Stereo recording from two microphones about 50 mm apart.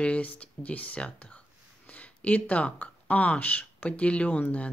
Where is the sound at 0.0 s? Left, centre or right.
Left.